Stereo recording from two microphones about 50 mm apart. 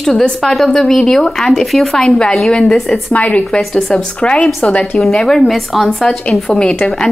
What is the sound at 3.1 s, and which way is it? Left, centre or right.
A woman's voice, left.